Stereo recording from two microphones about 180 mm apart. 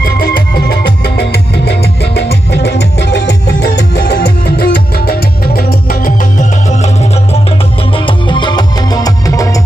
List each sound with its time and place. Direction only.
0.0 s music: 55° left (ahead or behind)
7.9 s music: 25° left (ahead or behind)